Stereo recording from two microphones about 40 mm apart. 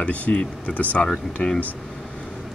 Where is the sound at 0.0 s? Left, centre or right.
Left.